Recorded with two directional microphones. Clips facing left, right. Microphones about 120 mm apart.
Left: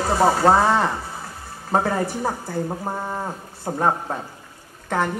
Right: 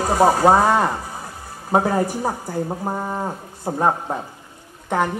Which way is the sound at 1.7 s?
15° right (ahead or behind).